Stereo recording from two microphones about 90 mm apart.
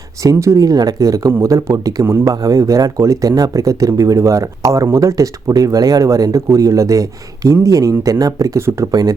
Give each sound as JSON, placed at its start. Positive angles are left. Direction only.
{"t": 0.2, "sound": "speech", "side_deg": -35}
{"t": 8.9, "sound": "speech", "side_deg": -45}